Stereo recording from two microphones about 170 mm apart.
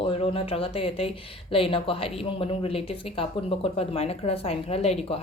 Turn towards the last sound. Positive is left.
turn(degrees=35)  # may be behind; listen again after turning